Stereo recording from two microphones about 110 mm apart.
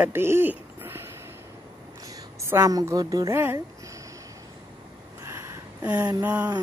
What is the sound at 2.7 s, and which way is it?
Speech, 35° right (ahead or behind).